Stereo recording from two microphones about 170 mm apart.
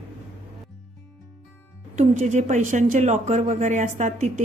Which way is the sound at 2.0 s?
45° right (ahead or behind).